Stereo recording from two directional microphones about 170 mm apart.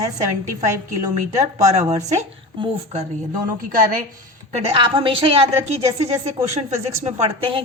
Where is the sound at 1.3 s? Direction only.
40° right (ahead or behind).